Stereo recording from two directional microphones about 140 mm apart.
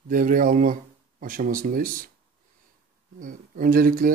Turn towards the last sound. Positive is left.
turn(degrees=-85)